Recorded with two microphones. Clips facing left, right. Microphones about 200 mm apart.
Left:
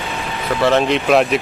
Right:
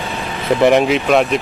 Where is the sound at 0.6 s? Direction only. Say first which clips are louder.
Right 3 dB; 15° right (ahead or behind).